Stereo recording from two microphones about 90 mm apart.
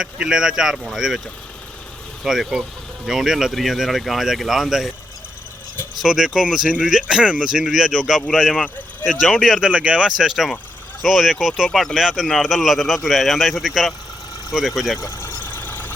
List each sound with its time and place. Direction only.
0.0 s speech: 10° right (ahead or behind)
2.2 s speech: centre (ahead or behind)
6.0 s speech: 5° right (ahead or behind)
14.9 s engine: 35° left (ahead or behind)